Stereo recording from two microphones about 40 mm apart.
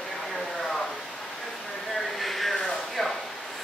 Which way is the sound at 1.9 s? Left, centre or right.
Centre.